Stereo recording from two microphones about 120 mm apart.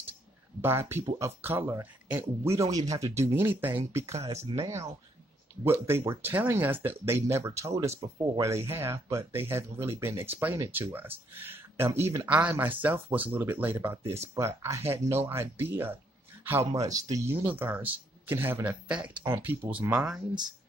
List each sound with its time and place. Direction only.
0.6 s speech: 20° right (ahead or behind)
12.3 s speech: 10° right (ahead or behind)
16.7 s speech: 30° right (ahead or behind); by 20.2 s 10° right (ahead or behind)